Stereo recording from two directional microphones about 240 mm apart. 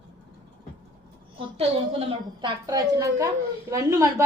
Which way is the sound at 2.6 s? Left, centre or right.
Centre.